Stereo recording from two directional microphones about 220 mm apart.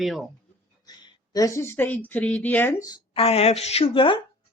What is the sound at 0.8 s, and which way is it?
A woman's voice, 15° left (ahead or behind).